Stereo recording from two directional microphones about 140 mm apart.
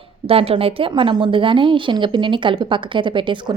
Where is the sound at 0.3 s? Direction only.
40° right (ahead or behind).